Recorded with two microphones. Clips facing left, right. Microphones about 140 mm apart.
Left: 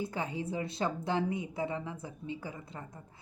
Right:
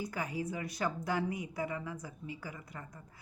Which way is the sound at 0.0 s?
25° left (ahead or behind).